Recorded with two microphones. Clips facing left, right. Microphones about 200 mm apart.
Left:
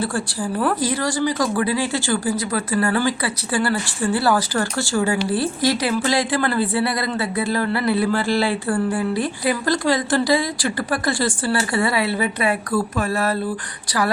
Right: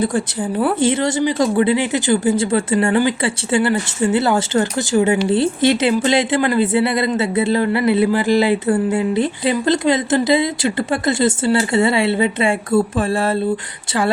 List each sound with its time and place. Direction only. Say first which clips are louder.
0.8 s speech: right 5 dB; 25° right (ahead or behind)